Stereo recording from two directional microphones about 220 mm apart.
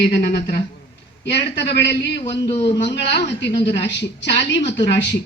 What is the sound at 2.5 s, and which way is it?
Speech, 25° left (ahead or behind).